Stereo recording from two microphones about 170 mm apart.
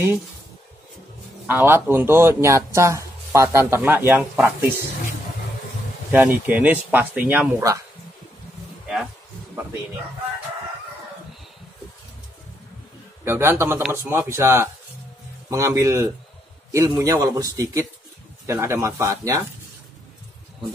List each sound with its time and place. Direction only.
1.5 s speech: 10° right (ahead or behind)
6.1 s speech: 10° right (ahead or behind)
13.2 s speech: 15° right (ahead or behind)